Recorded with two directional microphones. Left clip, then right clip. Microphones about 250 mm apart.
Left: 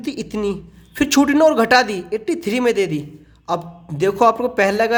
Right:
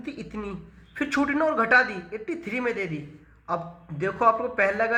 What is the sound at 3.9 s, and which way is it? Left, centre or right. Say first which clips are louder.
Speech: left 7 dB; left.